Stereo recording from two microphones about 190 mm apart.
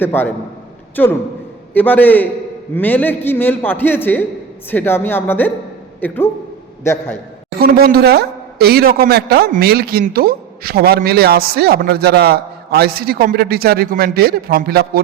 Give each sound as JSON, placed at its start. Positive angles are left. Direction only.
{"t": 0.0, "sound": "a man's voice", "side_deg": 10}
{"t": 7.6, "sound": "a woman's voice", "side_deg": -55}